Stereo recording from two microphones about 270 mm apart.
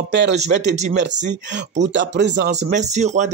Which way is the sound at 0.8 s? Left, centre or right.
Right.